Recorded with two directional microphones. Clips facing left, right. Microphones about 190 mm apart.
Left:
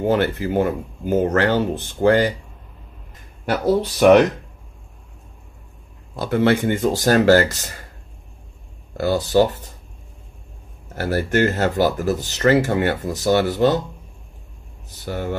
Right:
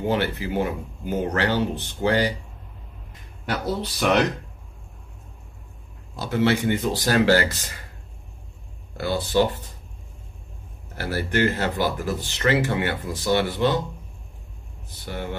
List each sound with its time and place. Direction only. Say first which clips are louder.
0.0 s speech: left 5 dB; 50° left (ahead or behind)
3.4 s speech: left 8 dB; 50° left (ahead or behind)
6.1 s speech: left 4 dB; 55° left (ahead or behind)
8.9 s speech: left 5 dB; 40° left (ahead or behind)
11.0 s speech: left 4 dB; 45° left (ahead or behind)
15.0 s speech: left 5 dB; 40° left (ahead or behind)